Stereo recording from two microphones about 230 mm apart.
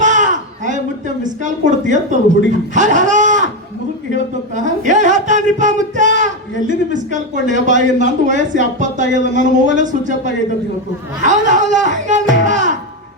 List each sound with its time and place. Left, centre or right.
0.0 s a sound: right
4.1 s speech: right
12.5 s music: right